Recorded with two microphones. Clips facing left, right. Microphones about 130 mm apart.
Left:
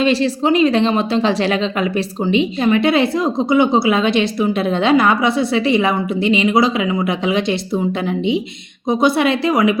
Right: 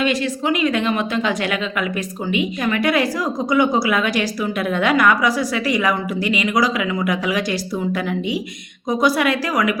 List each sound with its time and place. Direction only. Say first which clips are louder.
0.0 s a woman's voice: left 5 dB; 30° left (ahead or behind)
8.9 s a woman's voice: left 3 dB; 25° left (ahead or behind)